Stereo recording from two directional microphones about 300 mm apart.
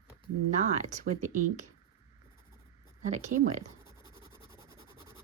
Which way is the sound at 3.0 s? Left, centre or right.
Right.